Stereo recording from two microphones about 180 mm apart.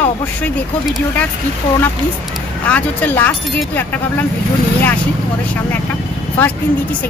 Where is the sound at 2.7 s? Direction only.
10° left (ahead or behind).